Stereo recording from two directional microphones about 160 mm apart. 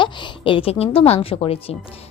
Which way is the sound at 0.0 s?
30° left (ahead or behind).